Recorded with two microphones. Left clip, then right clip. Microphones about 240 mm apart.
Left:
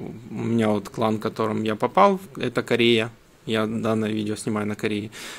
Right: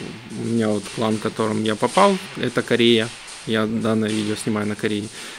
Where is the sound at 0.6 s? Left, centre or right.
Centre.